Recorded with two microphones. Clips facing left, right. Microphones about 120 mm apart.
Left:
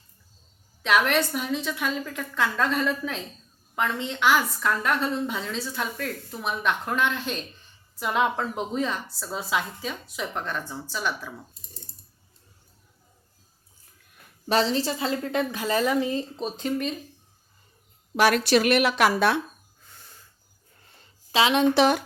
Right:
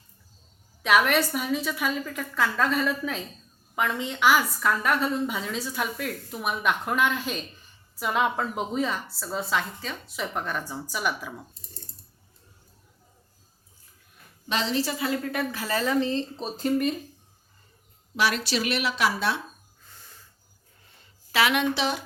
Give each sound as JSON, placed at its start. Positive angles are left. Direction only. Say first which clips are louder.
{"t": 0.8, "sound": "a woman's voice", "louder": "right 1 dB", "side_deg": -5}
{"t": 14.4, "sound": "a woman's voice", "louder": "left 4 dB", "side_deg": 35}
{"t": 16.4, "sound": "a woman's voice", "louder": "right 2 dB", "side_deg": 0}
{"t": 18.2, "sound": "speech", "louder": "left 6 dB", "side_deg": 50}
{"t": 21.3, "sound": "a woman's voice", "louder": "left 2 dB", "side_deg": 20}
{"t": 21.8, "sound": "speech", "louder": "left 8 dB", "side_deg": 55}